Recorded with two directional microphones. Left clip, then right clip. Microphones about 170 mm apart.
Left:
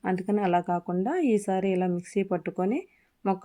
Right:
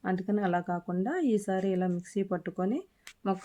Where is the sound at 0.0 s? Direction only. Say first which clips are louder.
Left 4 dB; 15° left (ahead or behind).